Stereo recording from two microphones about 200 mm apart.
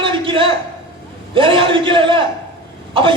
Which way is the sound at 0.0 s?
25° right (ahead or behind).